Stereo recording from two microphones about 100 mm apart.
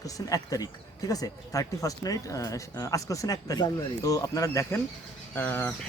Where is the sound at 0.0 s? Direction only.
35° left (ahead or behind).